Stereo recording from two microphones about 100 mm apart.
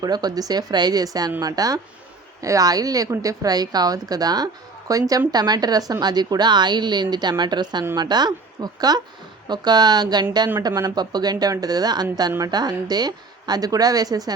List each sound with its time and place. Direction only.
0.0 s a woman's voice: 40° right (ahead or behind)